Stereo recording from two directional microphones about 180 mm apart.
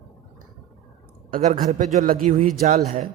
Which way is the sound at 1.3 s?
45° right (ahead or behind).